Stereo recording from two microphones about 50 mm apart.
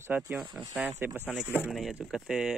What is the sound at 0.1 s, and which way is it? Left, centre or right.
Speech, right.